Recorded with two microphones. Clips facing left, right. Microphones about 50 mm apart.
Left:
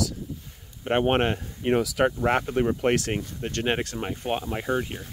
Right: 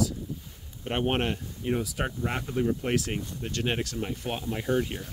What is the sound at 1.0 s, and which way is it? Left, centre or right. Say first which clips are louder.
Speech: left 3 dB; left.